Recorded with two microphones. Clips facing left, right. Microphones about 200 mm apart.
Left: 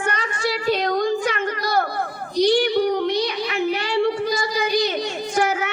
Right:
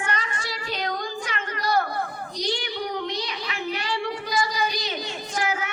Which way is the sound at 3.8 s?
25° left (ahead or behind).